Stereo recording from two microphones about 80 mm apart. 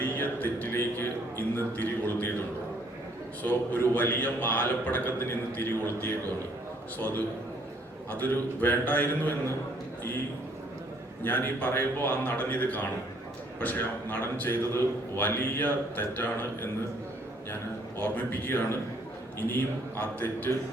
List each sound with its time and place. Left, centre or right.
0.0 s a sound: left
1.5 s a man's voice: left
3.4 s a man's voice: left
8.1 s a man's voice: left
11.2 s a man's voice: left